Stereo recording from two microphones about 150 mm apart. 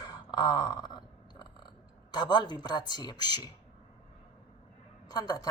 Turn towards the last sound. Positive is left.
turn(degrees=25)  # may be behind; listen again after turning